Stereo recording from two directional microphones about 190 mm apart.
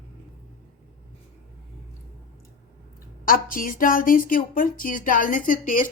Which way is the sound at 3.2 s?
45° left (ahead or behind).